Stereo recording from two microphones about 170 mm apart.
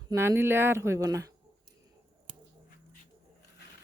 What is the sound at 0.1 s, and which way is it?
Speech, 15° right (ahead or behind).